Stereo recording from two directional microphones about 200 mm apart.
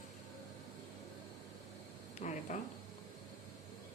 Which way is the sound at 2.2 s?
35° left (ahead or behind).